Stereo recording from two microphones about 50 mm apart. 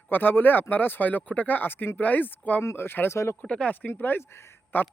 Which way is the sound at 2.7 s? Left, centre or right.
Left.